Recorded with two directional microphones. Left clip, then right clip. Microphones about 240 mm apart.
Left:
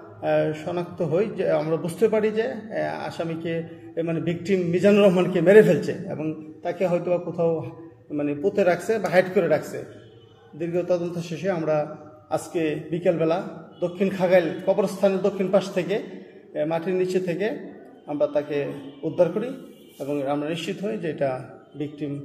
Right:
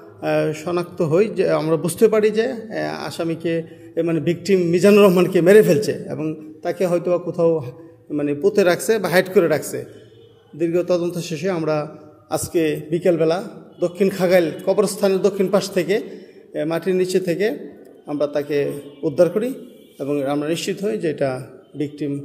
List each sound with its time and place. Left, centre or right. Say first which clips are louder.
0.2 s a man's voice: right 2 dB; right